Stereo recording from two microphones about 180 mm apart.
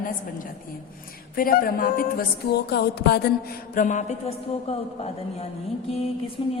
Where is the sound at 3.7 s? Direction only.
45° left (ahead or behind); by 6.5 s 25° left (ahead or behind).